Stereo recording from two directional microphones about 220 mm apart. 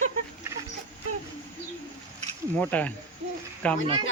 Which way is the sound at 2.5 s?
5° left (ahead or behind).